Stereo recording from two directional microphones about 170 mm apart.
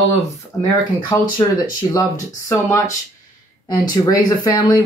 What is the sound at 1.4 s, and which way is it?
Speech, 25° left (ahead or behind).